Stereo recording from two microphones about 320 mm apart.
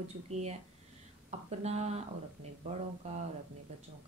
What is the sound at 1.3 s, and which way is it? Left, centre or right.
Speech, centre.